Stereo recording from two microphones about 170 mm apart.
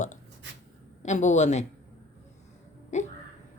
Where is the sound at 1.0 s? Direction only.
45° left (ahead or behind).